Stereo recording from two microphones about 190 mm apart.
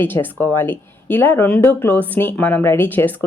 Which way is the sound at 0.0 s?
10° left (ahead or behind).